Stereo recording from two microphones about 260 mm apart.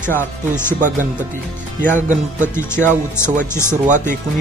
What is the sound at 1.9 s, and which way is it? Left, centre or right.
Speech, right.